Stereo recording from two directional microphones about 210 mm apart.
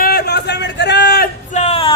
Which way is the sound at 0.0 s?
45° left (ahead or behind).